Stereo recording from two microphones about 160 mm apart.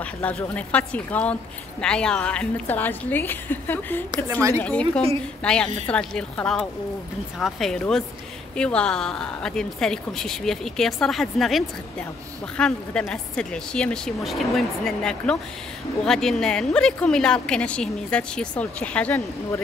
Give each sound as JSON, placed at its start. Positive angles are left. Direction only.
{"t": 0.0, "sound": "a woman's voice", "side_deg": 10}
{"t": 4.3, "sound": "a woman's voice", "side_deg": -20}
{"t": 4.6, "sound": "a woman's voice", "side_deg": 10}